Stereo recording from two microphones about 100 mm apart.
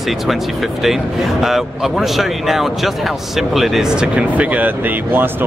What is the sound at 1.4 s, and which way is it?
Speech, centre (ahead or behind).